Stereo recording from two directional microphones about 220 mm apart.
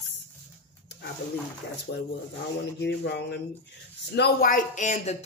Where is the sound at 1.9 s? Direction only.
50° left (ahead or behind).